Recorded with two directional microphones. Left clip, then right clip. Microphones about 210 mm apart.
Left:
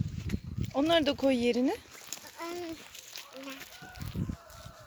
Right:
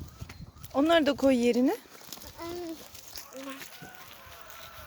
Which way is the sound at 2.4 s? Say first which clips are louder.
Right 1 dB; 10° right (ahead or behind).